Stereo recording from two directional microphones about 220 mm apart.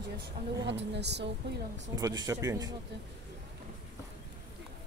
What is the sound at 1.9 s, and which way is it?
Speech, 15° right (ahead or behind).